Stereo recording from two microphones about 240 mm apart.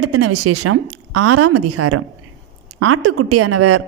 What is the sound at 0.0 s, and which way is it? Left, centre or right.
Speech, right.